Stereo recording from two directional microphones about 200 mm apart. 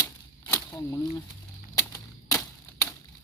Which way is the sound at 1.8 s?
15° left (ahead or behind).